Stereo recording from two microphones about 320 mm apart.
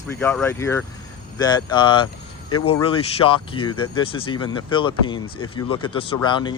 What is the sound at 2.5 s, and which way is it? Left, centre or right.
Speech, left.